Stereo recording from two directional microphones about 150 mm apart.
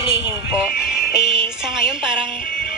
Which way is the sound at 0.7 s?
90° left.